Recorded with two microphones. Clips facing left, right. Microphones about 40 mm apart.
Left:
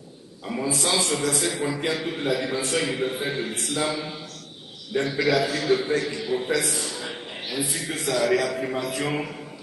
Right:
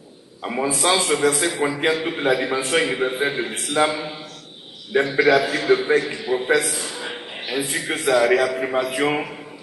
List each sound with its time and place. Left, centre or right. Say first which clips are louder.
0.4 s a woman's voice: right 5 dB; right
0.8 s a man's voice: right 7 dB; right
1.9 s a man's voice: right 7 dB; right
5.2 s a man's voice: right 5 dB; right
6.6 s a man's voice: right 2 dB; centre